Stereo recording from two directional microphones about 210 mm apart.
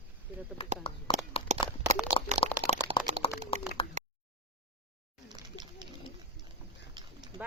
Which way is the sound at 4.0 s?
35° right (ahead or behind).